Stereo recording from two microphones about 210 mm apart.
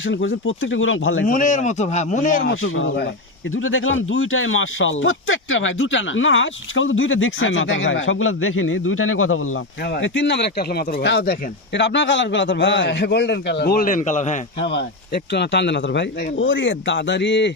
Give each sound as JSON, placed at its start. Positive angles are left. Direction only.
{"t": 0.0, "sound": "speech", "side_deg": 65}
{"t": 1.2, "sound": "speech", "side_deg": 40}
{"t": 2.6, "sound": "speech", "side_deg": 75}
{"t": 9.8, "sound": "speech", "side_deg": 55}
{"t": 14.7, "sound": "speech", "side_deg": 55}